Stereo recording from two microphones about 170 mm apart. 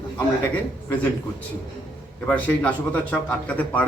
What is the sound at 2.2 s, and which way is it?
A man's voice, 10° left (ahead or behind).